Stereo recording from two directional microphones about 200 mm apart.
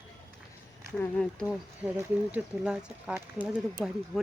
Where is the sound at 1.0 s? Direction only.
10° left (ahead or behind).